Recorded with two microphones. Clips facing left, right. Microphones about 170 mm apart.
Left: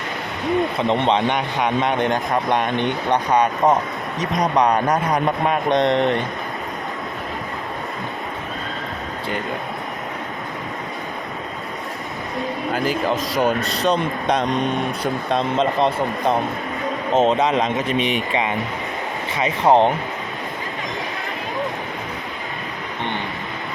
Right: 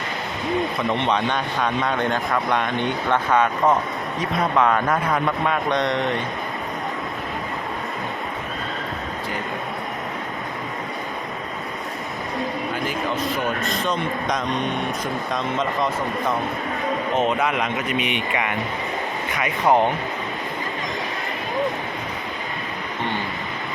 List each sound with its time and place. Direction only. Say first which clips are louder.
1.0 s speech: left 3 dB; 20° left (ahead or behind)
12.7 s a man's voice: left 9 dB; 35° left (ahead or behind)
13.1 s a man's voice: left 1 dB; 90° left
13.6 s a man's voice: left 4 dB; 35° left (ahead or behind)
17.2 s speech: left 6 dB; 25° left (ahead or behind)
19.3 s speech: left 3 dB; 25° left (ahead or behind)